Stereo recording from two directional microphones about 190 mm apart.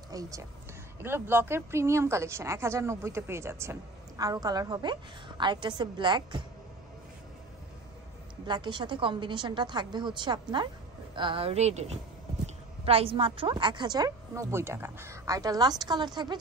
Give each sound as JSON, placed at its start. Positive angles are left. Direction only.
{"t": 0.1, "sound": "a woman's voice", "side_deg": -20}
{"t": 8.5, "sound": "a woman's voice", "side_deg": -25}